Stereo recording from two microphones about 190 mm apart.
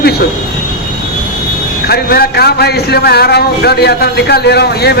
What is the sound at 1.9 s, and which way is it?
A man's voice, 55° left (ahead or behind).